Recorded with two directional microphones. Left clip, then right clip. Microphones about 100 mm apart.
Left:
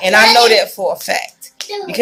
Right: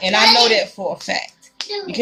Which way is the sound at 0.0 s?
15° right (ahead or behind).